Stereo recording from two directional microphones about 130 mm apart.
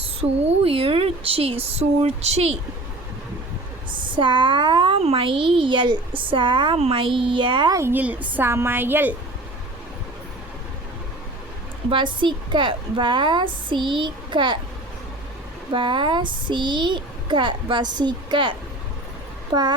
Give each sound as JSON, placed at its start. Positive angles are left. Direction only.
{"t": 0.2, "sound": "speech", "side_deg": -50}
{"t": 4.1, "sound": "a woman's voice", "side_deg": -40}
{"t": 4.9, "sound": "a woman's voice", "side_deg": -50}
{"t": 7.8, "sound": "a woman's voice", "side_deg": -15}
{"t": 11.9, "sound": "a woman's voice", "side_deg": -40}
{"t": 15.7, "sound": "a woman's voice", "side_deg": -40}